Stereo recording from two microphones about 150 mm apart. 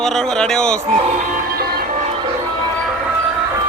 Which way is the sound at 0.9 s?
60° right (ahead or behind).